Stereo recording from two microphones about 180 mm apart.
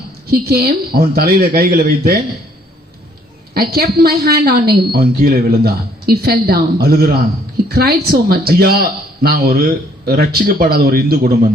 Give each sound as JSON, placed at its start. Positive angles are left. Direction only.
{"t": 0.3, "sound": "a woman's voice", "side_deg": -60}
{"t": 3.5, "sound": "a woman's voice", "side_deg": -55}